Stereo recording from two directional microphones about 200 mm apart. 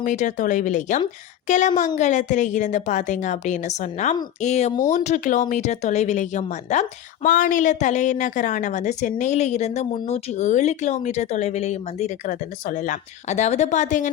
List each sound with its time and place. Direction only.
0.0 s speech: 40° left (ahead or behind)